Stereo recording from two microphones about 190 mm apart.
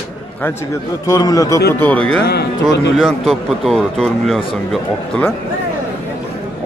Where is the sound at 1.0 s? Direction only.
20° left (ahead or behind); by 5.3 s 5° left (ahead or behind).